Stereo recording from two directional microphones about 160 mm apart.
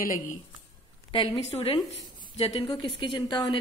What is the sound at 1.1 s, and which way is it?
A woman's voice, 35° left (ahead or behind).